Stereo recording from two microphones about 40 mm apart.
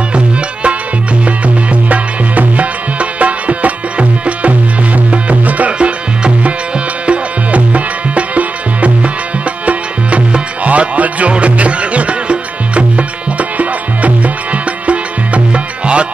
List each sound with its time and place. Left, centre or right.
1.2 s music: right